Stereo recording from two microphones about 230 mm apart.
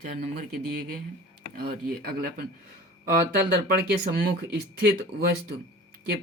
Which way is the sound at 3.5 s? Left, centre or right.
Right.